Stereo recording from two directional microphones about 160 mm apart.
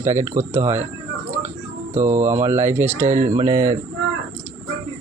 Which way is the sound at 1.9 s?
15° right (ahead or behind).